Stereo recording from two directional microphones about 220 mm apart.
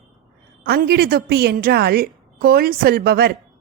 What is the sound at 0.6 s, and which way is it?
A woman's voice, 45° right (ahead or behind).